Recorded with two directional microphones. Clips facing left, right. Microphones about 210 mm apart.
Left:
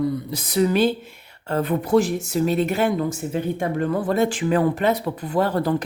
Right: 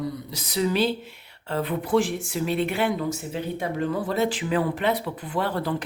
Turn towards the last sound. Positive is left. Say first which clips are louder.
# left 6 dB
turn(degrees=45)  # may be behind; listen again after turning